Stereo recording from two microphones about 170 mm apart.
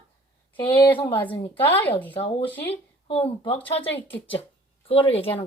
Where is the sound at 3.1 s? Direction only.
30° left (ahead or behind).